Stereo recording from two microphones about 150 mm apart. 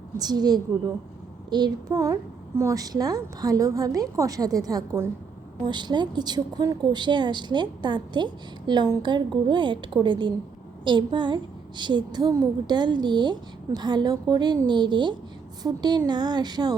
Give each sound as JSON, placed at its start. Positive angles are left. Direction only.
{"t": 0.2, "sound": "a woman's voice", "side_deg": -25}